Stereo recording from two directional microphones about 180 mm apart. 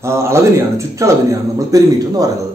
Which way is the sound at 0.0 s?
15° right (ahead or behind).